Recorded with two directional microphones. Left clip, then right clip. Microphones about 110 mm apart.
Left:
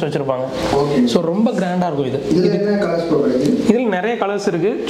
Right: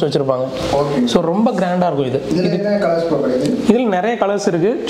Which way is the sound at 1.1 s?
45° right (ahead or behind).